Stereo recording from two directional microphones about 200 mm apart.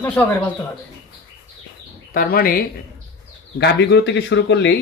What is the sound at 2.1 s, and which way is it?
Speech, 45° left (ahead or behind).